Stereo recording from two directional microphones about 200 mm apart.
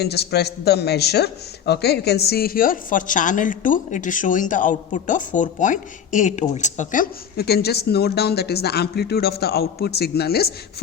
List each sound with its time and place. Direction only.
0.0 s a man's voice: 55° left (ahead or behind)